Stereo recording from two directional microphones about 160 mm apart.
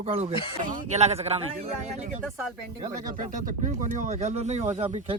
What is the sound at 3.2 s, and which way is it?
Speech, 55° right (ahead or behind).